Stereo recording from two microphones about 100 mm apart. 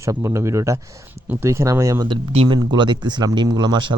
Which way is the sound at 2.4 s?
50° right (ahead or behind).